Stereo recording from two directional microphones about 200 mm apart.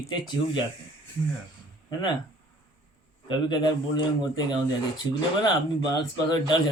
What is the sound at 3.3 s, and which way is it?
Speech, 20° left (ahead or behind).